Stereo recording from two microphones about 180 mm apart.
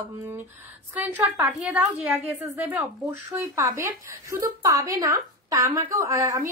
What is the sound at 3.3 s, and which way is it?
A woman's voice, 15° right (ahead or behind).